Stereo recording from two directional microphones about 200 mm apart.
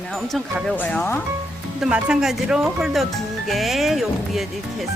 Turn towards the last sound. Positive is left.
turn(degrees=0)  # may be behind; listen again after turning